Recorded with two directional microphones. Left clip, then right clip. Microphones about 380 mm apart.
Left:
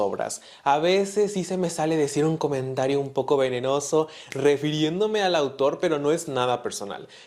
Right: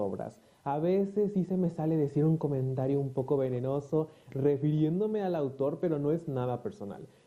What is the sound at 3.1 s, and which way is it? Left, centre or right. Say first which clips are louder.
Speech: left 8 dB; centre.